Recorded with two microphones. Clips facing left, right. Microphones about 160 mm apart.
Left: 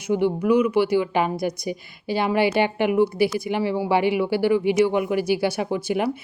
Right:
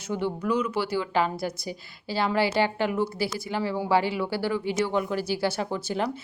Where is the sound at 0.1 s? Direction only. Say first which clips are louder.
Left 7 dB; 15° left (ahead or behind).